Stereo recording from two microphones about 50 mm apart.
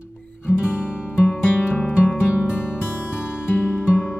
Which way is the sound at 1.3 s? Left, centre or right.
Left.